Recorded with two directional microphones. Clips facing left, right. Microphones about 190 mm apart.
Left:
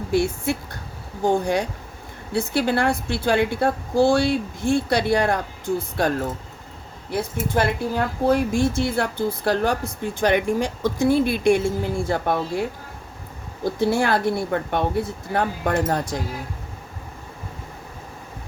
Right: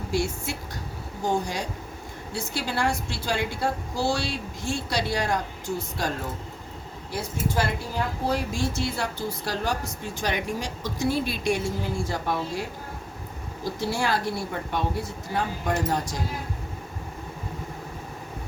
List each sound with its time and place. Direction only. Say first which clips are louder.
0.1 s speech: left 7 dB; 60° left (ahead or behind)
7.1 s speech: left 5 dB; 55° left (ahead or behind)
13.7 s speech: left 6 dB; 55° left (ahead or behind)